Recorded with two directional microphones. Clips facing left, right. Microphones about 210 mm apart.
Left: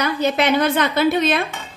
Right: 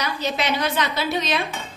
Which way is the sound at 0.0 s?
55° left (ahead or behind).